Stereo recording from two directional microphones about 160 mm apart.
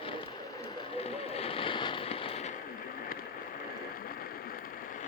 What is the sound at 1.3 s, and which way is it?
Fireworks, 35° left (ahead or behind).